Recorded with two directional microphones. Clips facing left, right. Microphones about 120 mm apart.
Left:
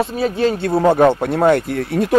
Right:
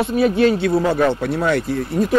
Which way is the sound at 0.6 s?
50° left (ahead or behind).